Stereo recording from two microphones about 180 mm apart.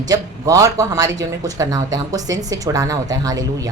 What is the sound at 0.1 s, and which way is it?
A woman's voice, 20° right (ahead or behind).